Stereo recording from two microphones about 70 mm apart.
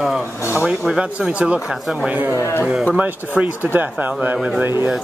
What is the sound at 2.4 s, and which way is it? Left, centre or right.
Speech, left.